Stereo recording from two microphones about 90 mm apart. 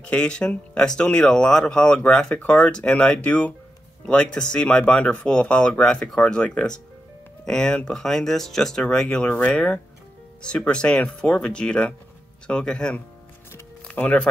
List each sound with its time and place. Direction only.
0.0 s speech: 10° left (ahead or behind)